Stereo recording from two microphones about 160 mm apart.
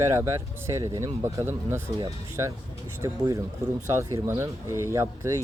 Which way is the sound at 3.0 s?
20° right (ahead or behind).